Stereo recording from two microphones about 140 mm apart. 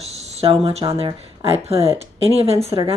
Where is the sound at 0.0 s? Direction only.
50° right (ahead or behind).